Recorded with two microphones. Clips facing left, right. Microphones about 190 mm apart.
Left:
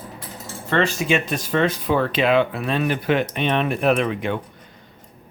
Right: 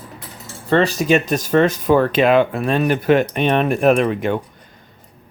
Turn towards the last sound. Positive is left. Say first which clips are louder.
# right 5 dB
turn(degrees=-45)  # may be behind; listen again after turning